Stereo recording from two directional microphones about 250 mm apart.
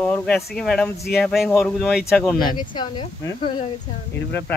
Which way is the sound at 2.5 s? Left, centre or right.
Centre.